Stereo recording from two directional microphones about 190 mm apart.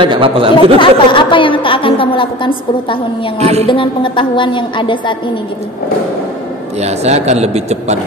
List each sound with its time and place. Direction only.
0.0 s speech: 25° right (ahead or behind)
0.7 s a woman's voice: 25° left (ahead or behind)
3.3 s a man's voice: 35° right (ahead or behind)
3.6 s a woman's voice: 25° left (ahead or behind)
6.8 s a man's voice: 35° right (ahead or behind)